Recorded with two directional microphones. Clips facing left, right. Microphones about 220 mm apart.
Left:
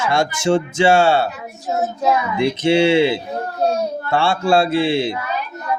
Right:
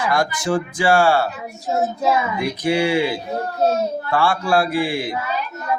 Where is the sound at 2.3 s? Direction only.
25° left (ahead or behind).